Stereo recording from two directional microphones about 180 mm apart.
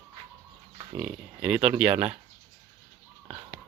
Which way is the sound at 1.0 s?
5° right (ahead or behind).